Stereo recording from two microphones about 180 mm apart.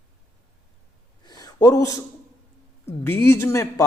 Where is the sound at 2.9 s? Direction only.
15° left (ahead or behind).